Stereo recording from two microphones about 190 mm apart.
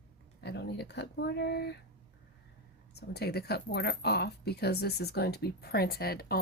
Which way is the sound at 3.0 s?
55° left (ahead or behind).